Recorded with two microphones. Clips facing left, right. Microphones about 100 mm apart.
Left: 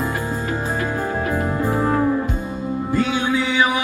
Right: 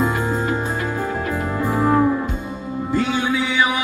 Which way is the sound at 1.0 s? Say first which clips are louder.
Left 1 dB; 20° left (ahead or behind).